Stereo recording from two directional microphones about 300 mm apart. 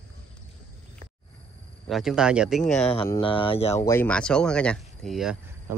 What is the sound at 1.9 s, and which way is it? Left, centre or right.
Speech, centre.